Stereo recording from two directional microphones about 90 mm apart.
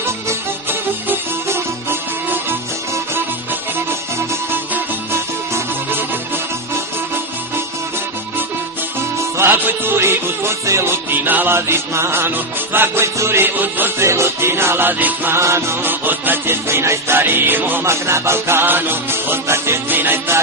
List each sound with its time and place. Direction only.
0.3 s music: 25° right (ahead or behind)
5.5 s music: 25° right (ahead or behind)
9.4 s music: 25° right (ahead or behind)